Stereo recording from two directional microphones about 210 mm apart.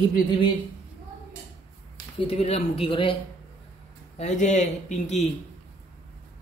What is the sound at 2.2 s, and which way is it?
Speech, 30° left (ahead or behind).